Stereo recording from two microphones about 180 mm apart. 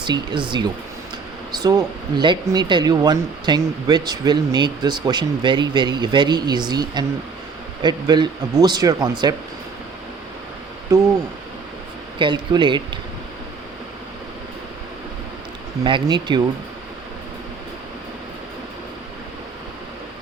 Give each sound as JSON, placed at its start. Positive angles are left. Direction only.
{"t": 0.0, "sound": "speech", "side_deg": -25}
{"t": 10.9, "sound": "speech", "side_deg": -20}
{"t": 12.2, "sound": "speech", "side_deg": -25}
{"t": 15.8, "sound": "speech", "side_deg": -25}